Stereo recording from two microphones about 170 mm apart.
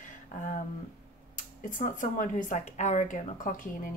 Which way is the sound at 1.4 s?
50° left (ahead or behind).